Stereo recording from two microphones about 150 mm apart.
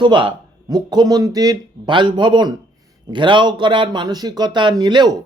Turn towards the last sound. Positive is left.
turn(degrees=-30)  # may be behind; listen again after turning